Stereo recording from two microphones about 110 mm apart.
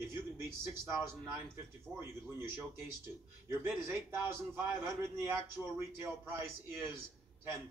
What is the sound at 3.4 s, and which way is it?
A man's voice, 25° right (ahead or behind).